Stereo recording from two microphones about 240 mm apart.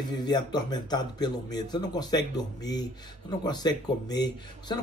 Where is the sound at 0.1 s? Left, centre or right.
Centre.